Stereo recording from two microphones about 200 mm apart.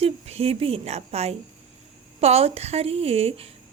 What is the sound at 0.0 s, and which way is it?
A woman's voice, 30° right (ahead or behind).